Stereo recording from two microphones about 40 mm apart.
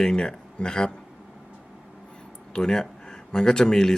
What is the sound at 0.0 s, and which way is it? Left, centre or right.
Speech, centre.